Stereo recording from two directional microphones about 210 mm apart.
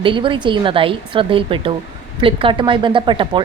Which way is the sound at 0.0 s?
25° right (ahead or behind).